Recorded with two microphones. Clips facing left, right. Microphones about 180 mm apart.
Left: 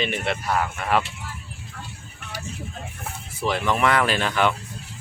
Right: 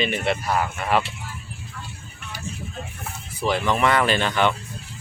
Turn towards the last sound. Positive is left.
turn(degrees=5)  # may be behind; listen again after turning